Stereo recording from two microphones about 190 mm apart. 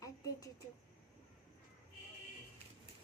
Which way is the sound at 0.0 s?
20° left (ahead or behind).